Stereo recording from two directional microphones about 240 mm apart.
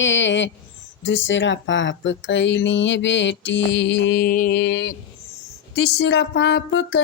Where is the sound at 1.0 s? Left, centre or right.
Left.